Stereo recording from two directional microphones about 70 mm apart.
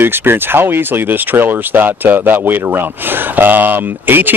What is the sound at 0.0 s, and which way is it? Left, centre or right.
Speech, right.